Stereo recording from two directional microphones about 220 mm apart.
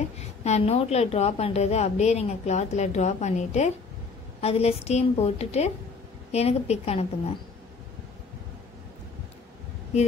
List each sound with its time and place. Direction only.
0.4 s a woman's voice: 30° left (ahead or behind)